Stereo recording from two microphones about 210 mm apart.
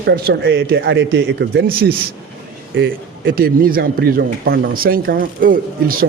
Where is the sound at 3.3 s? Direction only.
45° right (ahead or behind).